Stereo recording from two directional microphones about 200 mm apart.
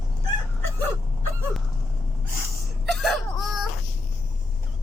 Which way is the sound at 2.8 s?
Centre (ahead or behind).